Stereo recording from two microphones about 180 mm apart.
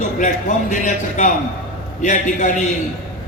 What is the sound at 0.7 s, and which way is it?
A man's voice, 45° left (ahead or behind).